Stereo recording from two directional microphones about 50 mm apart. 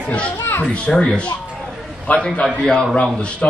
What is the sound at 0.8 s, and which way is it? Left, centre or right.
Speech, centre.